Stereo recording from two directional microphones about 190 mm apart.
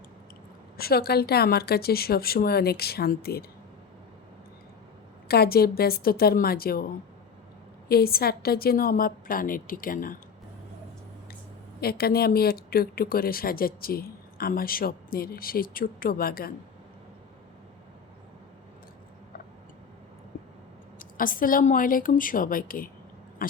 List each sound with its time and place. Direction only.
0.8 s a woman's voice: 55° left (ahead or behind)
5.3 s speech: 55° left (ahead or behind)
11.8 s speech: 55° left (ahead or behind)
21.0 s speech: 45° left (ahead or behind)
23.4 s a sound: 50° left (ahead or behind)